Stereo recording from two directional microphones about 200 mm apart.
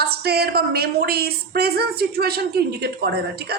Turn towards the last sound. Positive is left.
turn(degrees=-50)  # may be behind; listen again after turning